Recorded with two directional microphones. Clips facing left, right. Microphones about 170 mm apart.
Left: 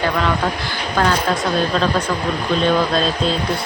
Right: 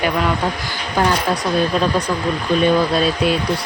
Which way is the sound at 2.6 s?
10° right (ahead or behind).